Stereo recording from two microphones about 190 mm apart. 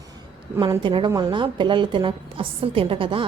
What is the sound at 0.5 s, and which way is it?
Speech, 15° right (ahead or behind).